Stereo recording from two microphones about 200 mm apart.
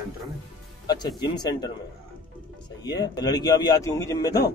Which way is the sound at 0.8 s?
20° left (ahead or behind).